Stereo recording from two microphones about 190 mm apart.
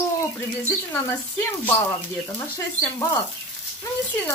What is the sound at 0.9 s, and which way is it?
Speech, 10° left (ahead or behind).